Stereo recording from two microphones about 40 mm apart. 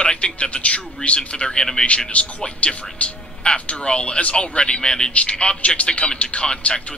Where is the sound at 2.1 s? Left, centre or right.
Left.